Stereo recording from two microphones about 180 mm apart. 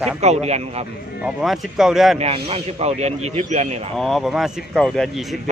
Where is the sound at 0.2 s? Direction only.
35° right (ahead or behind).